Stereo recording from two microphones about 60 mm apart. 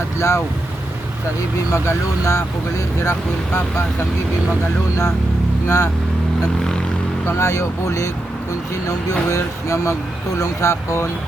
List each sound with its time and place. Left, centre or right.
0.2 s speech: left
1.7 s speech: left
5.6 s speech: left
7.3 s speech: left